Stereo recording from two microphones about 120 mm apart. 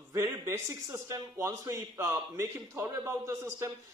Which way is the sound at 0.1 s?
20° right (ahead or behind).